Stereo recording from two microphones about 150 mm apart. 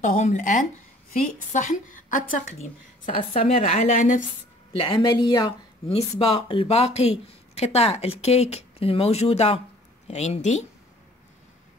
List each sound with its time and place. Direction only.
0.0 s a woman's voice: 50° left (ahead or behind)
3.1 s speech: 40° left (ahead or behind); by 4.2 s 55° left (ahead or behind)
4.7 s speech: 35° left (ahead or behind)